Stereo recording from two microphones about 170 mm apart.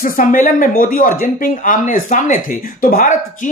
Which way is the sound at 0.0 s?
55° left (ahead or behind).